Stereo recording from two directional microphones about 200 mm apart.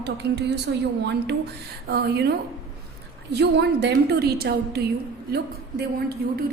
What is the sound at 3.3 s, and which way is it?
A woman's voice, 55° right (ahead or behind).